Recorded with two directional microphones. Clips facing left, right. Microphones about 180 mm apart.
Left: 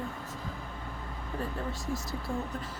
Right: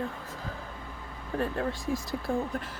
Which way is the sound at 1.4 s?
80° right.